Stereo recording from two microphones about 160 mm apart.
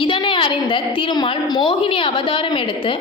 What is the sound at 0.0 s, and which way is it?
A woman's voice, 30° left (ahead or behind).